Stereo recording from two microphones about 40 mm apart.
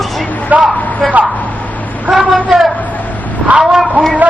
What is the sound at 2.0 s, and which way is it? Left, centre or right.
A woman's voice, centre.